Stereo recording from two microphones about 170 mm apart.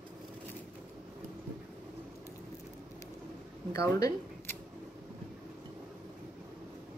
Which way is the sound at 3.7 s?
20° left (ahead or behind).